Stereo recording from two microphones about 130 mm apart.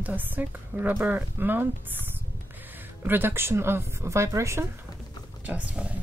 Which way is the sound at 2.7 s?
15° right (ahead or behind).